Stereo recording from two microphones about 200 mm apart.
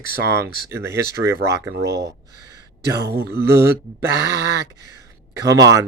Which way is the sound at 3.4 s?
15° right (ahead or behind).